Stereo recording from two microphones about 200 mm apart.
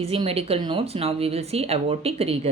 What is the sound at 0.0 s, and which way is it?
Speech, 30° right (ahead or behind).